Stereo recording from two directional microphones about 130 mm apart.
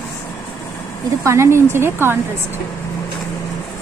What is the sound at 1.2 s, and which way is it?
Speech, 20° right (ahead or behind).